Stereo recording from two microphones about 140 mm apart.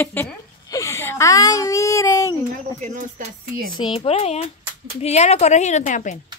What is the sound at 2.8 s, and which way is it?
Speech, 70° right (ahead or behind).